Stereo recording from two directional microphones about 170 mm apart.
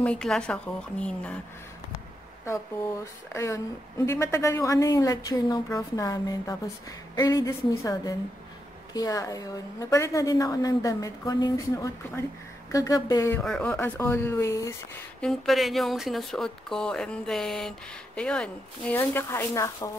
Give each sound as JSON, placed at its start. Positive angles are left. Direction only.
{"t": 0.0, "sound": "a woman's voice", "side_deg": 5}
{"t": 3.3, "sound": "a woman's voice", "side_deg": 20}
{"t": 13.4, "sound": "a woman's voice", "side_deg": 5}
{"t": 15.1, "sound": "speech", "side_deg": 0}